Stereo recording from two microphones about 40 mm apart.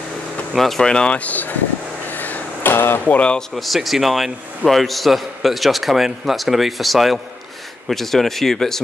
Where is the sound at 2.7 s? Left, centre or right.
Left.